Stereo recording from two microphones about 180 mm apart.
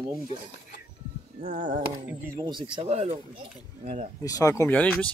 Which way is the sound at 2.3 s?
25° right (ahead or behind).